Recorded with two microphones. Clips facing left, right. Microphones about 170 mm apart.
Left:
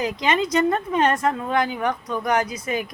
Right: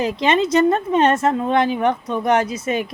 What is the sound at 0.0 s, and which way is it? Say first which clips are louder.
A woman's voice: right 4 dB; 25° right (ahead or behind).